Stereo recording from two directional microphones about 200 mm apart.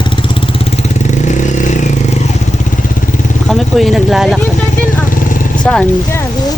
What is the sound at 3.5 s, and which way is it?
Speech, centre (ahead or behind).